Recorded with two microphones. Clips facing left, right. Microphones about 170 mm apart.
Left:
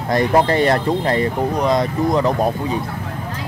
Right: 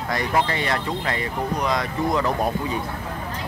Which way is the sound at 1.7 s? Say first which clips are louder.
Left 6 dB; 25° left (ahead or behind).